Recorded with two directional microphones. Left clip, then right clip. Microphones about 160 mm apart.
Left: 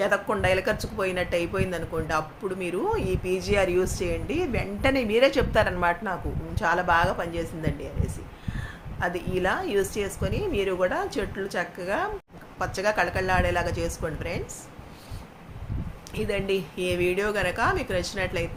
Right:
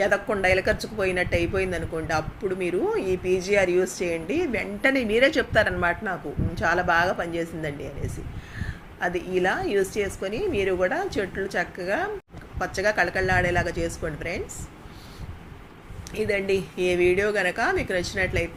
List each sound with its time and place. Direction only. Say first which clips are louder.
0.0 s speech: right 2 dB; 10° left (ahead or behind)
3.8 s speech: right 2 dB; centre (ahead or behind)
9.0 s speech: right 2 dB; 10° left (ahead or behind)
16.1 s speech: right 3 dB; 10° left (ahead or behind)